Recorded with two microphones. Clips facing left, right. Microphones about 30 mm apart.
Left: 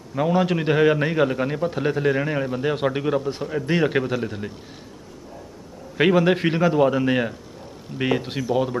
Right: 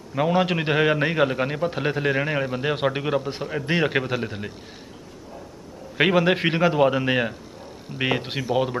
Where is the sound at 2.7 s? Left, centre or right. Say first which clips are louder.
Even; centre.